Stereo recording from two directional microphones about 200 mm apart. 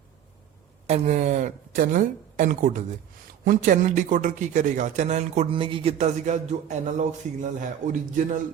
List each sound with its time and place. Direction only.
0.9 s a man's voice: 35° right (ahead or behind)